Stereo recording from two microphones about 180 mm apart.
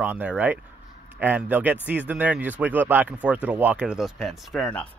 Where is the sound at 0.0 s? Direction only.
10° right (ahead or behind); by 4.9 s 10° left (ahead or behind).